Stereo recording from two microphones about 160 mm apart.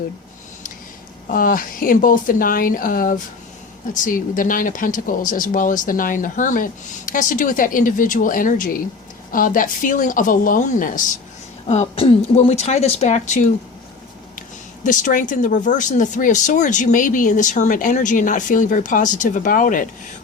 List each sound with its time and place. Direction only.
1.3 s speech: 60° left (ahead or behind)
11.7 s speech: 45° left (ahead or behind)
14.8 s speech: 55° left (ahead or behind)